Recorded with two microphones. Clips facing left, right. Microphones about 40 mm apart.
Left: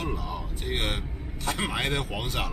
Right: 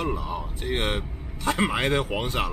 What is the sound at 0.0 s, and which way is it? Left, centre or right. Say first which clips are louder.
Speech: right 4 dB; centre.